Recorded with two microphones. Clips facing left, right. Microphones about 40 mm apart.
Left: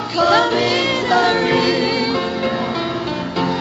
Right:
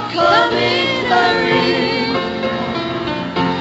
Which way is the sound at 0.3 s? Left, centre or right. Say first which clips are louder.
Right 1 dB; centre.